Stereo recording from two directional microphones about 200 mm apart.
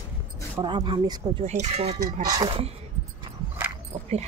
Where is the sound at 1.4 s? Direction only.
35° right (ahead or behind).